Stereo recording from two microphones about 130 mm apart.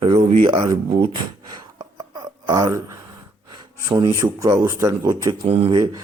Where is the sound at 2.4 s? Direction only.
25° right (ahead or behind).